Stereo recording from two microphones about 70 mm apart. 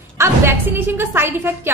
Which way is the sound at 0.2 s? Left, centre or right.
Right.